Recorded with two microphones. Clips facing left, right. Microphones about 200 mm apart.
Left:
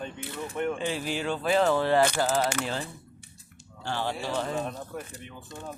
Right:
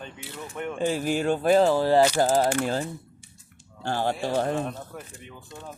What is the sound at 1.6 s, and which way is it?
Speech, 35° right (ahead or behind).